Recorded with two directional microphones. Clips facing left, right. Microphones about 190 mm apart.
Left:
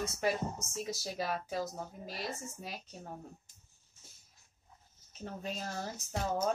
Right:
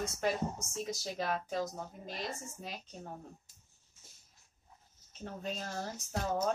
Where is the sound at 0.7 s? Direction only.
5° left (ahead or behind).